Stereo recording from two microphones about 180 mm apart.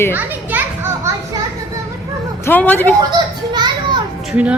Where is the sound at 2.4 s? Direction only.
10° left (ahead or behind).